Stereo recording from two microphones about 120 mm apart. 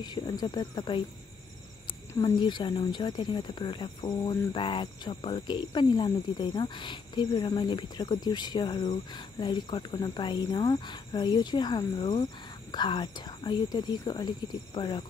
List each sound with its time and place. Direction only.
0.0 s speech: 35° left (ahead or behind)
2.4 s speech: 40° left (ahead or behind)